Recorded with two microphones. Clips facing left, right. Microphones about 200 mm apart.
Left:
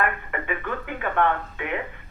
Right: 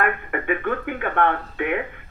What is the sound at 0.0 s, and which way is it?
Speech, 55° right (ahead or behind).